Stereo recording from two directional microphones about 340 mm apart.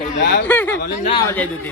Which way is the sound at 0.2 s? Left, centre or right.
Left.